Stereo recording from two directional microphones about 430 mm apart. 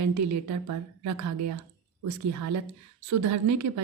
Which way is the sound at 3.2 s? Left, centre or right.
Right.